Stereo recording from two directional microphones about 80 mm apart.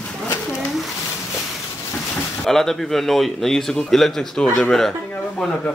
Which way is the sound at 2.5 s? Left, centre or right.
Centre.